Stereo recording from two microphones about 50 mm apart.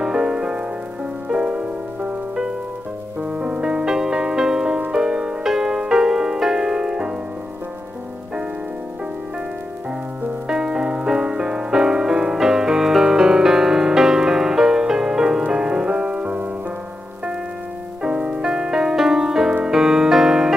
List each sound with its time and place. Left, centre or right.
0.0 s music: centre
3.2 s music: right
10.5 s music: centre
18.0 s music: centre